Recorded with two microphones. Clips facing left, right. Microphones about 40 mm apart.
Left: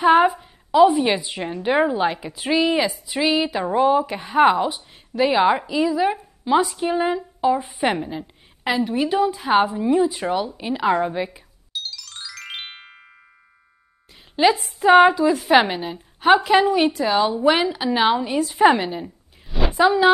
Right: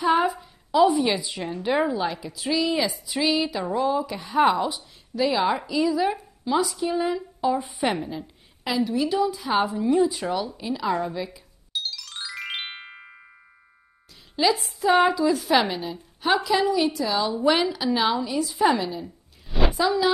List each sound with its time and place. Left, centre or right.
0.0 s a sound: left
0.9 s a woman's voice: left
3.1 s a woman's voice: left
3.6 s a woman's voice: left
5.6 s a woman's voice: left
6.4 s a woman's voice: left
7.4 s a woman's voice: left
8.6 s a woman's voice: left; by 10.3 s centre
10.6 s a woman's voice: left
11.7 s music: centre
14.3 s a woman's voice: left
17.5 s a woman's voice: left